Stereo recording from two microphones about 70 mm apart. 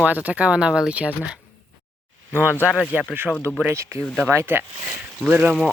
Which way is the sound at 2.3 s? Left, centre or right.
Right.